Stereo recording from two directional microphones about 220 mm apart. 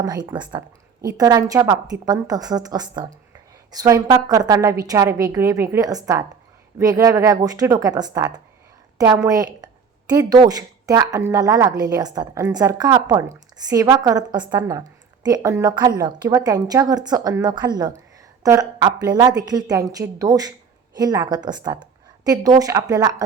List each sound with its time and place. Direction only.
0.0 s speech: 15° right (ahead or behind)